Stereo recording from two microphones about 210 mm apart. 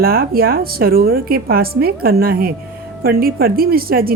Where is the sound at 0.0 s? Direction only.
45° right (ahead or behind).